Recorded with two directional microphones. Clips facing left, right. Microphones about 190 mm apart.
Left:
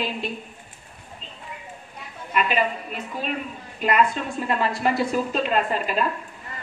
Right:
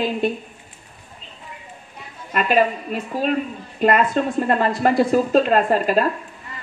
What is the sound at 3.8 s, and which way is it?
A woman's voice, 45° right (ahead or behind).